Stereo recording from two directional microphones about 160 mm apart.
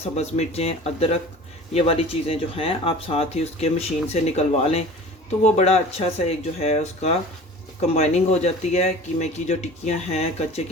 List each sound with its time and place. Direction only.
0.0 s speech: 40° left (ahead or behind)